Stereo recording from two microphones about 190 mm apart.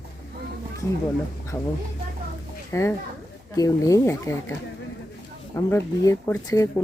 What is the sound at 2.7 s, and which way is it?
Speech, 15° left (ahead or behind).